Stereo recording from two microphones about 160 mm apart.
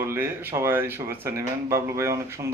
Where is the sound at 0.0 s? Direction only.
15° right (ahead or behind).